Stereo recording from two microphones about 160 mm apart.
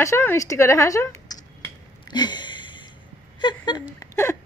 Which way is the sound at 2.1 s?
25° left (ahead or behind).